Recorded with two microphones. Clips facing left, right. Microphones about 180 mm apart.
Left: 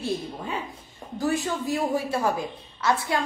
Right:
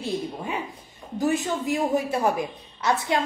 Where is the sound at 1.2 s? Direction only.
20° right (ahead or behind).